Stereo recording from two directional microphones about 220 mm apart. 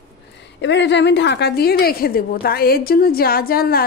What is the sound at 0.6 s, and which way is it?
A woman's voice, 55° left (ahead or behind).